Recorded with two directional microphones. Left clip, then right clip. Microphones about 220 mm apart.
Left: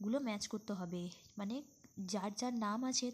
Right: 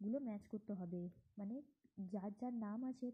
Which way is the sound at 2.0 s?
10° left (ahead or behind).